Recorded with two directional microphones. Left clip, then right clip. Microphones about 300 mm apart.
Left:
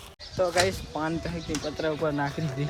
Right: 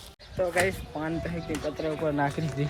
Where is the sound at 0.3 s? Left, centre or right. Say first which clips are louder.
Left 2 dB; centre.